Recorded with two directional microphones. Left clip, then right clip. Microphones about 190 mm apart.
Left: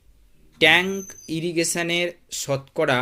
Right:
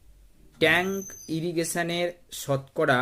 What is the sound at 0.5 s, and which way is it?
Speech, 20° left (ahead or behind).